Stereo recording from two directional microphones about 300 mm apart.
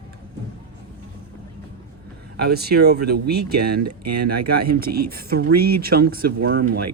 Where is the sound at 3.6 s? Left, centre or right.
Right.